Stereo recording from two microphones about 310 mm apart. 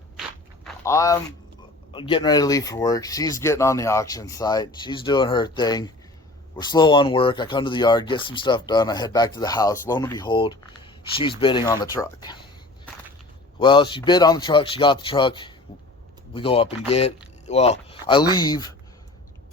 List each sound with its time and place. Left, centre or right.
0.2 s walk: centre
1.9 s speech: centre